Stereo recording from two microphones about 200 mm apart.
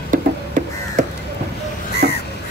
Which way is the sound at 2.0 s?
50° right (ahead or behind).